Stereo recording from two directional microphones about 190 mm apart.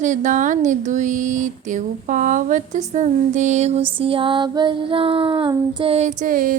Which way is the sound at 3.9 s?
30° right (ahead or behind).